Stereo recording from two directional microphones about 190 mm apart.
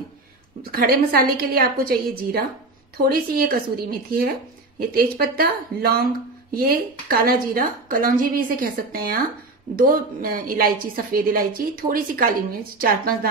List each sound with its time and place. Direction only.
0.7 s a woman's voice: 55° right (ahead or behind)